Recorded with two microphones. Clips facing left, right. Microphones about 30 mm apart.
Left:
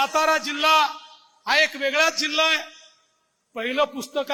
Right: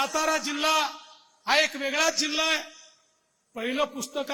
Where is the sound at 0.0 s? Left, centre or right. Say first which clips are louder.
Left 5 dB; left.